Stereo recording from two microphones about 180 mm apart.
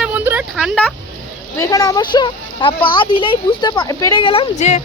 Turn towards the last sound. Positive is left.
turn(degrees=40)  # may be behind; listen again after turning